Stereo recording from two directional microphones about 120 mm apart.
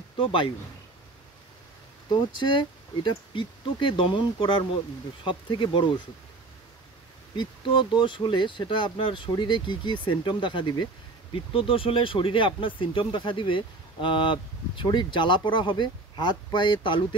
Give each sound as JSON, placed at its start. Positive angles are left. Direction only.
{"t": 2.0, "sound": "speech", "side_deg": 40}
{"t": 7.3, "sound": "speech", "side_deg": 40}